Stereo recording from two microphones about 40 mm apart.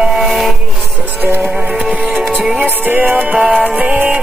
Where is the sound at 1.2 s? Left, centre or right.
Right.